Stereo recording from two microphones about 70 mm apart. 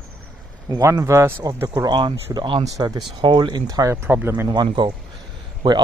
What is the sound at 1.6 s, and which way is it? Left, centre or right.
Speech, right.